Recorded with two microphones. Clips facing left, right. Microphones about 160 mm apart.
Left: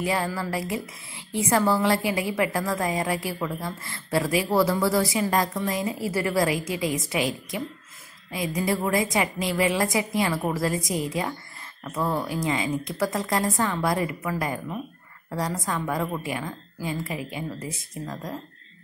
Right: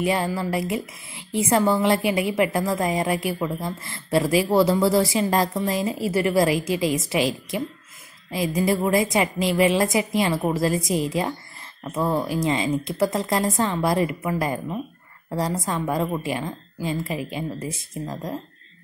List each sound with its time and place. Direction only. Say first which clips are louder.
0.0 s a woman's voice: right 3 dB; 20° right (ahead or behind)
8.3 s a woman's voice: right 4 dB; 25° right (ahead or behind)